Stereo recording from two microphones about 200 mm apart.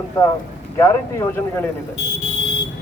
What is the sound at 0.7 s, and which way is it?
Speech, 15° left (ahead or behind).